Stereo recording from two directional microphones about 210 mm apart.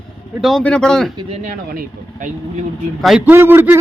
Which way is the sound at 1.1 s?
30° right (ahead or behind).